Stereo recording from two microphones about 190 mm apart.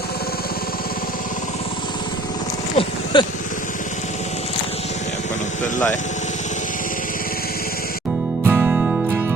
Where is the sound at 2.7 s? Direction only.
25° left (ahead or behind).